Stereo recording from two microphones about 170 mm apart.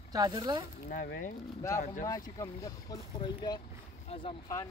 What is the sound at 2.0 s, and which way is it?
Speech, 20° left (ahead or behind).